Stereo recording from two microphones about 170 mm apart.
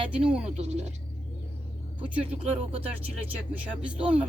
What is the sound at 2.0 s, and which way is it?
Speech, 10° right (ahead or behind).